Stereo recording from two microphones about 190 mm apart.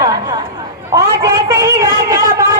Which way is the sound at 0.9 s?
15° right (ahead or behind).